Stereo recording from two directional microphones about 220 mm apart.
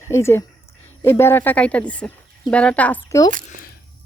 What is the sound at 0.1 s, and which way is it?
Speech, 10° left (ahead or behind).